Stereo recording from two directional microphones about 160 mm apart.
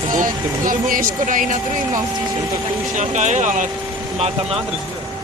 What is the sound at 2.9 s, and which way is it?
Speech, 50° right (ahead or behind).